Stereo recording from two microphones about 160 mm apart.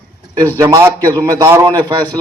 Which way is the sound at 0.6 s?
15° right (ahead or behind).